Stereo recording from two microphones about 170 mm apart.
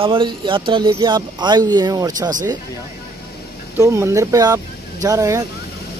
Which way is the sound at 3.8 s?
15° right (ahead or behind).